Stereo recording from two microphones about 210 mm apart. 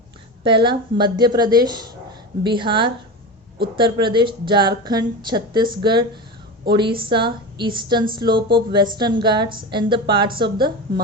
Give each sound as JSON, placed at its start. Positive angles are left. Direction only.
{"t": 0.4, "sound": "a woman's voice", "side_deg": -20}